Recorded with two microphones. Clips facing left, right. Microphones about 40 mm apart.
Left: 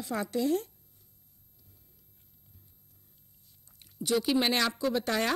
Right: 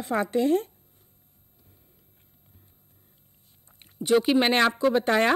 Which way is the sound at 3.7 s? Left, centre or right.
Right.